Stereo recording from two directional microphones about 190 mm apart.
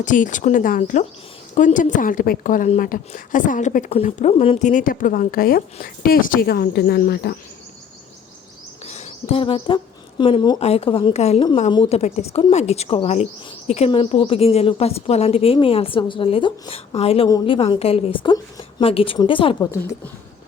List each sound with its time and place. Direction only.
0.0 s a woman's voice: 40° left (ahead or behind)
8.8 s a woman's voice: 35° left (ahead or behind)